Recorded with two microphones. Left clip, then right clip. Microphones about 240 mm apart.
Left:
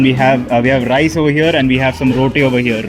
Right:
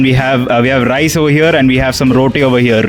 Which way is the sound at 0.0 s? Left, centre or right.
Right.